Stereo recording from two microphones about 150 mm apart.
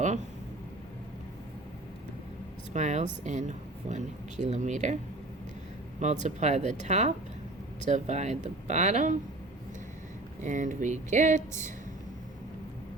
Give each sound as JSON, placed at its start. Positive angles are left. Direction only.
{"t": 2.7, "sound": "speech", "side_deg": -50}
{"t": 6.2, "sound": "speech", "side_deg": -50}
{"t": 10.4, "sound": "speech", "side_deg": -55}